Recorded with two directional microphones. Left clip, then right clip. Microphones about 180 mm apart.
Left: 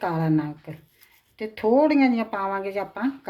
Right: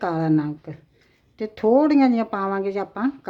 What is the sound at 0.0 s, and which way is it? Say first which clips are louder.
Speech: right 3 dB; 45° right (ahead or behind).